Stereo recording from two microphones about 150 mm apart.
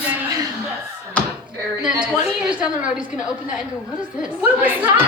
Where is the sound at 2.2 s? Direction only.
5° right (ahead or behind).